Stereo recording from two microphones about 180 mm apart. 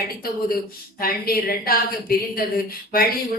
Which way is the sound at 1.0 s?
55° left (ahead or behind).